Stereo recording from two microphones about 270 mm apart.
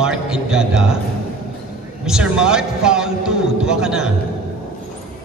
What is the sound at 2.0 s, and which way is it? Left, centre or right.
A man's voice, centre.